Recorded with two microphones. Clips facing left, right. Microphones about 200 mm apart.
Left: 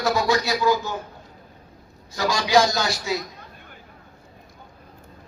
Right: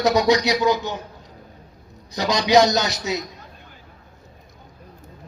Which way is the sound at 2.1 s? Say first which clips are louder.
Right 3 dB; 20° right (ahead or behind).